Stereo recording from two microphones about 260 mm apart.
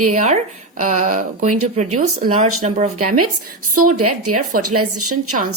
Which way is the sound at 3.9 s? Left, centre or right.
Right.